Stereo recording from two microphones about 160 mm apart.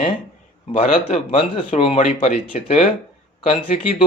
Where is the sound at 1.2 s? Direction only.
35° left (ahead or behind).